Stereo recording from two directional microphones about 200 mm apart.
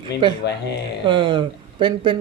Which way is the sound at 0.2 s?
25° right (ahead or behind).